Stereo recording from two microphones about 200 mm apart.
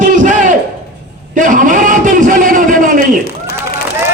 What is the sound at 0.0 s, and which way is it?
Battle cry, 40° right (ahead or behind).